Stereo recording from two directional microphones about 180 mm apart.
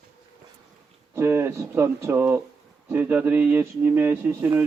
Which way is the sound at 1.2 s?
10° right (ahead or behind).